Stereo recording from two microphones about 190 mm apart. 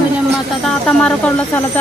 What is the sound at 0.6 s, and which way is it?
Speech, 5° left (ahead or behind).